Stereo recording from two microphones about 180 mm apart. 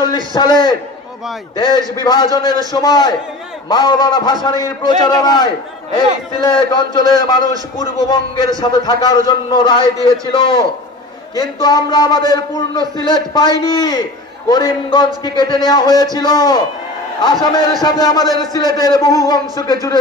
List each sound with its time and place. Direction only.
0.0 s a man's voice: 25° left (ahead or behind)
2.0 s a man's voice: 25° left (ahead or behind)